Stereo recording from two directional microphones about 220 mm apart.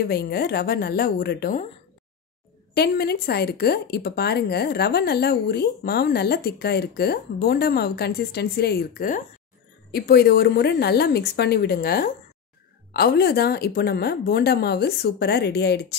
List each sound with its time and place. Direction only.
0.0 s speech: 45° left (ahead or behind)
2.7 s speech: 45° left (ahead or behind)